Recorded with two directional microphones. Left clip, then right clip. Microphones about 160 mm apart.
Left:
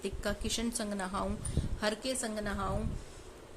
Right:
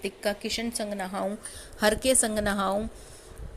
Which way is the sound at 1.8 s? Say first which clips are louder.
Right 11 dB; 40° right (ahead or behind).